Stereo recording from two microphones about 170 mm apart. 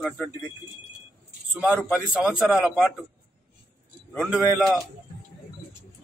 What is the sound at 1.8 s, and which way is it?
A man's voice, centre (ahead or behind).